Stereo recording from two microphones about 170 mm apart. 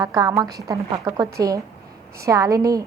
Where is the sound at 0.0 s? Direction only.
20° right (ahead or behind).